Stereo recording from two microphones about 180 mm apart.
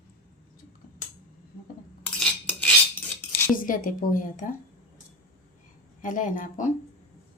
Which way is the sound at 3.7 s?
50° left (ahead or behind).